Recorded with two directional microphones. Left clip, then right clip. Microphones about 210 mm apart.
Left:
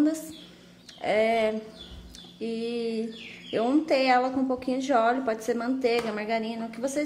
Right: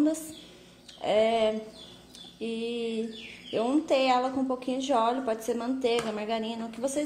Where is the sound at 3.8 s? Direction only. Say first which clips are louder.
Even; 30° left (ahead or behind).